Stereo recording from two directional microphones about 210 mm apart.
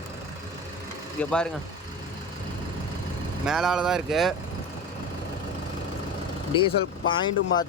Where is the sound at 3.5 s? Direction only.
Centre (ahead or behind).